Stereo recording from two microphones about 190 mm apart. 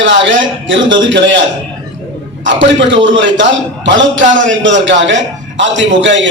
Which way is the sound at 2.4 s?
75° right (ahead or behind).